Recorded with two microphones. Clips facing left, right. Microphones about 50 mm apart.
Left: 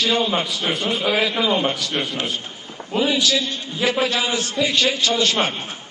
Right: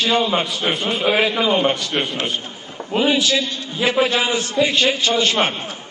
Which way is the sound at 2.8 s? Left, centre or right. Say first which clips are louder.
Right 6 dB; right.